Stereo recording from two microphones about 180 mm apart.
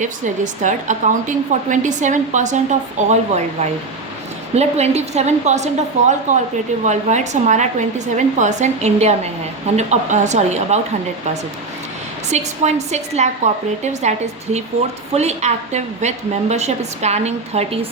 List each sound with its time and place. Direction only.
0.0 s a woman's voice: 45° right (ahead or behind)
12.3 s a woman's voice: 40° right (ahead or behind)
15.1 s a woman's voice: 40° right (ahead or behind)